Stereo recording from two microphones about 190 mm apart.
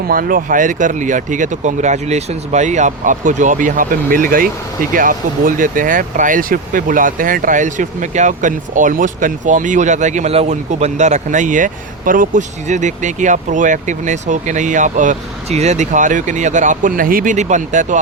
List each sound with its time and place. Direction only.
0.1 s speech: 50° right (ahead or behind)